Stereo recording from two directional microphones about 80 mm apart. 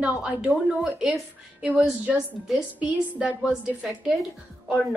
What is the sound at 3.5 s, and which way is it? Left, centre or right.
Speech, centre.